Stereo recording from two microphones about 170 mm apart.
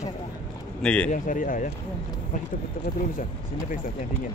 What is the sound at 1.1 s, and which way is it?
Speech, 50° left (ahead or behind).